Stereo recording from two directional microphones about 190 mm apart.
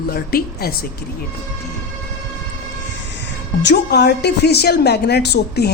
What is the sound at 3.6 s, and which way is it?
A woman's voice, 60° left (ahead or behind).